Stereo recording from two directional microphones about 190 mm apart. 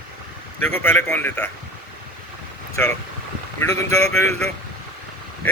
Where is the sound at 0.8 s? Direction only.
10° left (ahead or behind).